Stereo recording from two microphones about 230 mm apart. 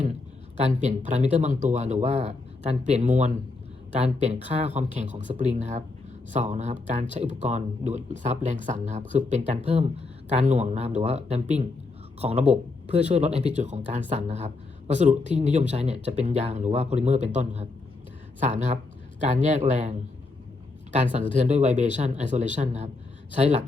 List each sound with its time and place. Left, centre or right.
0.6 s speech: right
21.3 s speech: right